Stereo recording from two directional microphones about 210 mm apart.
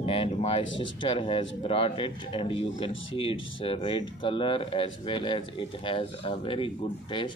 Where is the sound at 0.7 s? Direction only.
25° left (ahead or behind).